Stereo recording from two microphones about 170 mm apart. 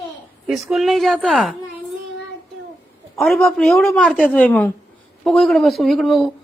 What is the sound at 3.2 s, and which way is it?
A woman's voice, centre (ahead or behind).